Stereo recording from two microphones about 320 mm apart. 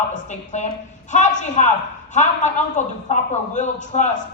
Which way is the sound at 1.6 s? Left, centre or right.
Left.